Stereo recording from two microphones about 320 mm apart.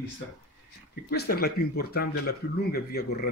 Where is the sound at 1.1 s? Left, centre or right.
Left.